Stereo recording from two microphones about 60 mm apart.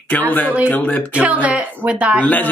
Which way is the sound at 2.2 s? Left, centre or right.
Left.